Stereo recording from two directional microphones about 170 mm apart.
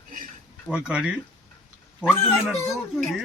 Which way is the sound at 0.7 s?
5° right (ahead or behind).